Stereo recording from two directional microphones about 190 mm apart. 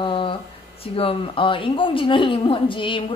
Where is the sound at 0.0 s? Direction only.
25° left (ahead or behind).